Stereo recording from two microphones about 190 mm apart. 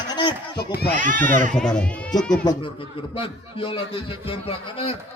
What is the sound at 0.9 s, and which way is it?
Speech, 45° right (ahead or behind).